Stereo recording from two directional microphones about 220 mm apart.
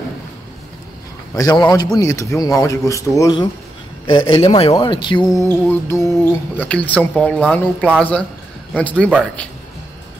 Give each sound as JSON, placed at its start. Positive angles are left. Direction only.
{"t": 1.3, "sound": "a man's voice", "side_deg": 15}